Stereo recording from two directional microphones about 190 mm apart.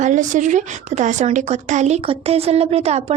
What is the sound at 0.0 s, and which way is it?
A woman's voice, 40° right (ahead or behind).